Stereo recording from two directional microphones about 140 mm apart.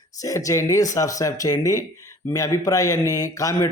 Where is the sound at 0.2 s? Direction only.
25° left (ahead or behind).